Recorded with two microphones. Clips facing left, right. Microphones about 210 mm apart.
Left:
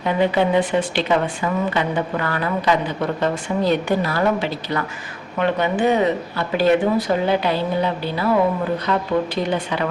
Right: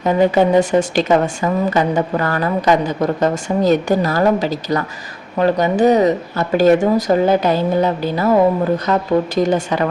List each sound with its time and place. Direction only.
0.0 s speech: 40° right (ahead or behind)